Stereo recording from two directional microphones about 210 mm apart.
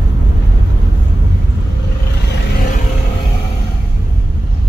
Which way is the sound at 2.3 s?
45° left (ahead or behind).